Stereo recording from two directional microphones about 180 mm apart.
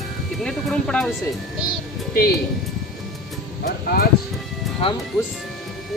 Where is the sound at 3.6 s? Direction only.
60° left (ahead or behind).